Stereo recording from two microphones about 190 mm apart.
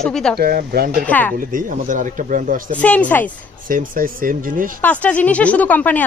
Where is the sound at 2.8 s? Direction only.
5° left (ahead or behind).